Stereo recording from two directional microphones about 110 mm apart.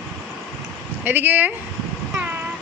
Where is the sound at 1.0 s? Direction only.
15° right (ahead or behind).